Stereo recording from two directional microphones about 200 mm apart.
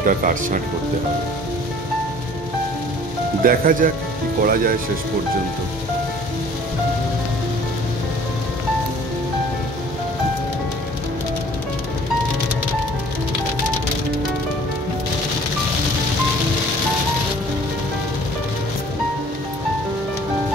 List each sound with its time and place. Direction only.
0.0 s speech: 40° right (ahead or behind)
3.4 s speech: 45° right (ahead or behind)